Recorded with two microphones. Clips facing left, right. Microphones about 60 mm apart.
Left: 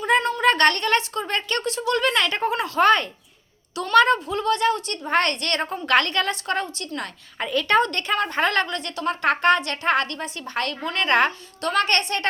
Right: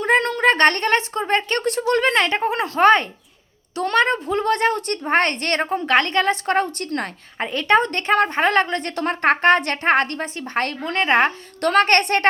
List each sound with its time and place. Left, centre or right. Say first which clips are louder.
0.2 s a sound: right 2 dB; right
0.4 s a woman's voice: right 3 dB; right
4.3 s a woman's voice: right 2 dB; right
7.3 s a woman's voice: right 2 dB; right
11.6 s a woman's voice: right 6 dB; right